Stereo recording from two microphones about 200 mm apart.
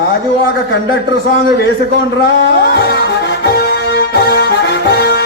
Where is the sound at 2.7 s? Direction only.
55° left (ahead or behind).